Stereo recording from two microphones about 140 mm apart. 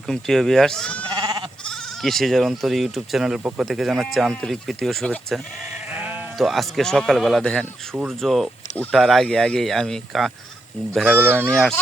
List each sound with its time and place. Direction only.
0.1 s speech: centre (ahead or behind)
1.1 s goat: 30° right (ahead or behind)
1.6 s speech: 5° left (ahead or behind)
5.9 s sheep: 10° right (ahead or behind)
6.3 s speech: centre (ahead or behind)
10.9 s speech: 10° right (ahead or behind)
11.5 s speech: 5° left (ahead or behind)